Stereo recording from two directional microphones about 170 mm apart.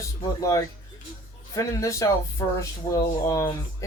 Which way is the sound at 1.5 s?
20° left (ahead or behind).